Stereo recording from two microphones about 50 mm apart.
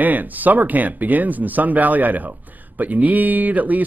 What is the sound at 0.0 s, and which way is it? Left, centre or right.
Speech, right.